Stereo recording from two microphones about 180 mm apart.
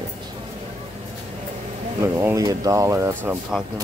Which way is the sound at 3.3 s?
5° right (ahead or behind).